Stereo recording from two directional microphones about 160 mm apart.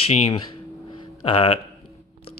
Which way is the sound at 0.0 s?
40° left (ahead or behind).